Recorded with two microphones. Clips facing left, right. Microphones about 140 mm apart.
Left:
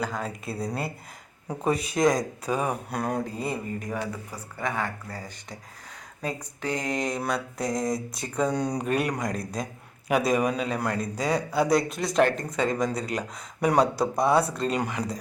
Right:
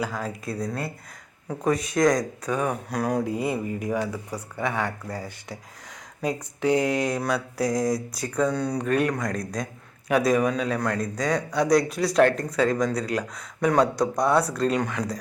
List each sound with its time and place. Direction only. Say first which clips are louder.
0.0 s a man's voice: right 1 dB; centre (ahead or behind)
1.6 s speech: right 2 dB; 30° left (ahead or behind)
2.6 s a man's voice: right 3 dB; centre (ahead or behind)
3.2 s a man's voice: right 5 dB; 10° right (ahead or behind)
8.4 s speech: even; 15° left (ahead or behind)
10.1 s a man's voice: right 2 dB; centre (ahead or behind)